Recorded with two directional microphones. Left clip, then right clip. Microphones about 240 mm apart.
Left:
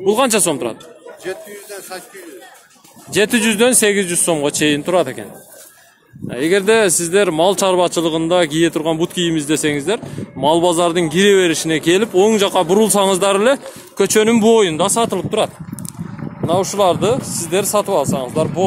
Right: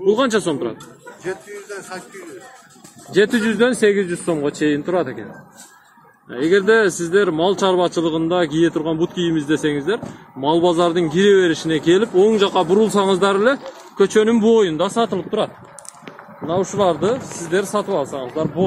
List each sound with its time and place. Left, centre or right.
0.0 s speech: left
1.2 s speech: left
3.1 s speech: left
6.3 s speech: left